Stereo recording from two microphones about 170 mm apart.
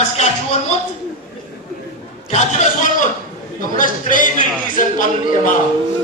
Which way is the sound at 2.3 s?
45° left (ahead or behind).